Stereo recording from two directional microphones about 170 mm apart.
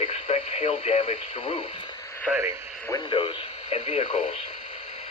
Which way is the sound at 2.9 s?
30° left (ahead or behind).